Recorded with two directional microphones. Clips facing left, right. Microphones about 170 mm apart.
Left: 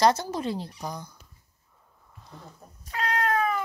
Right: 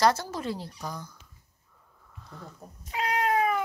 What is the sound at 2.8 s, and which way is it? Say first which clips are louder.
Cat: even; 15° right (ahead or behind).